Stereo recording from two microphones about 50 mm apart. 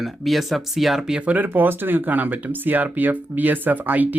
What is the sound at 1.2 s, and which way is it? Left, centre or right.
Speech, right.